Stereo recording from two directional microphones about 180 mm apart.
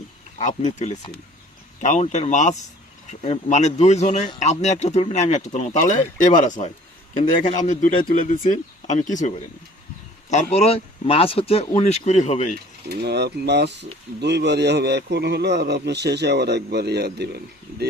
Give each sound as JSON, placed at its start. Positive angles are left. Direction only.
{"t": 0.3, "sound": "speech", "side_deg": 40}
{"t": 10.2, "sound": "speech", "side_deg": 35}
{"t": 12.9, "sound": "speech", "side_deg": -65}